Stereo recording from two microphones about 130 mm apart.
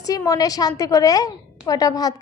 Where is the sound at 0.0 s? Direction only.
25° left (ahead or behind).